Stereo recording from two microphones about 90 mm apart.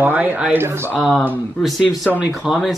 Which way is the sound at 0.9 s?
10° right (ahead or behind).